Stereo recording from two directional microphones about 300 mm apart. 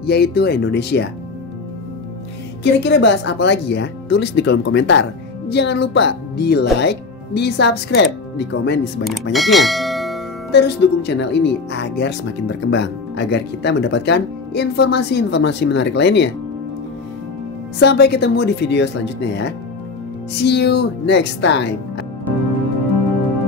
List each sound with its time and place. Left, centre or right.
0.0 s speech: left
2.6 s speech: left
9.3 s bell: centre
10.5 s speech: left
17.7 s speech: left